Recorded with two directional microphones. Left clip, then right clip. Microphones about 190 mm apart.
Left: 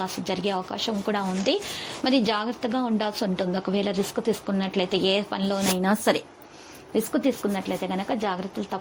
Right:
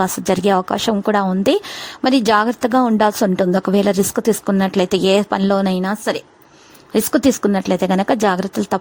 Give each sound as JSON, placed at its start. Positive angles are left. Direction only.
{"t": 0.0, "sound": "a woman's voice", "side_deg": -55}
{"t": 5.8, "sound": "a woman's voice", "side_deg": -10}
{"t": 7.1, "sound": "a woman's voice", "side_deg": -50}